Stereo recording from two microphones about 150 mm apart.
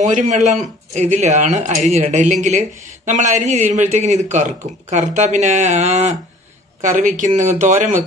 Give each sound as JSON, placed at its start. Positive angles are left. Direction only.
{"t": 0.0, "sound": "a man's voice", "side_deg": -55}
{"t": 6.8, "sound": "speech", "side_deg": -60}